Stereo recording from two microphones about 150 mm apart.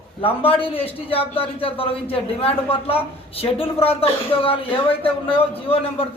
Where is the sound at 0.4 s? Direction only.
40° left (ahead or behind).